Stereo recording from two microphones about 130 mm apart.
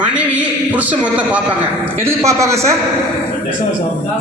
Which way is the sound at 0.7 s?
10° right (ahead or behind).